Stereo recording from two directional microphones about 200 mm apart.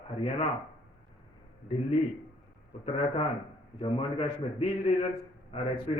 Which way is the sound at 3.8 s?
30° left (ahead or behind).